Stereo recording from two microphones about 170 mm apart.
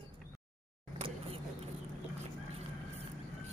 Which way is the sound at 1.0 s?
35° right (ahead or behind).